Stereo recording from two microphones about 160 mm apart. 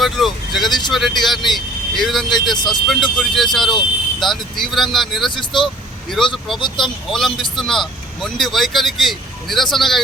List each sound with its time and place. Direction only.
0.0 s speech: centre (ahead or behind)
5.3 s speech: 30° left (ahead or behind)
5.6 s vehicle: centre (ahead or behind)
6.3 s speech: centre (ahead or behind)